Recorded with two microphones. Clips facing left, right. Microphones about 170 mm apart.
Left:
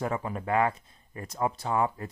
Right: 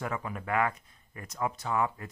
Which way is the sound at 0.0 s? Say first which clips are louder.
Left 4 dB; 30° left (ahead or behind).